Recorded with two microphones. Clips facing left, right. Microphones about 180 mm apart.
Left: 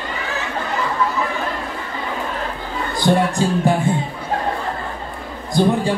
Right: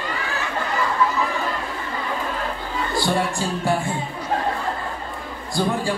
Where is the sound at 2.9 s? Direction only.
20° left (ahead or behind).